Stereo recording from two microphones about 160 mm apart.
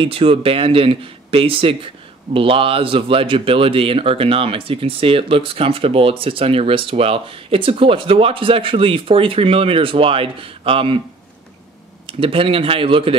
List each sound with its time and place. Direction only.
0.0 s speech: 35° right (ahead or behind)
12.1 s speech: 35° right (ahead or behind)